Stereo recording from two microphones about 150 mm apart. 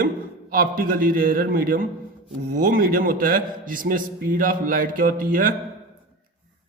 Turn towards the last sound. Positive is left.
turn(degrees=-70)  # may be behind; listen again after turning